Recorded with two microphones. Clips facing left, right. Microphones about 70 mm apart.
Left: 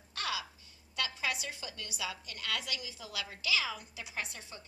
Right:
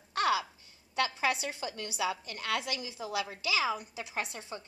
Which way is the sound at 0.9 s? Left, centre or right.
Right.